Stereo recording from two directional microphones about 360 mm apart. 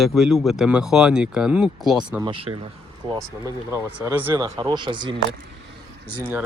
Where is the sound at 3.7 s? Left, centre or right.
Centre.